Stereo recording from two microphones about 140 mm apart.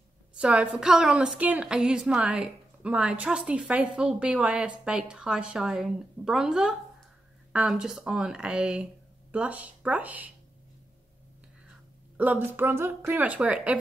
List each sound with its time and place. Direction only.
0.4 s a woman's voice: 10° right (ahead or behind)
12.2 s a woman's voice: 15° right (ahead or behind)